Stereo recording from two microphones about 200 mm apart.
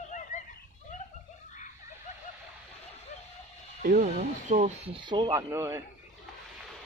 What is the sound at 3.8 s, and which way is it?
Speech, 40° right (ahead or behind).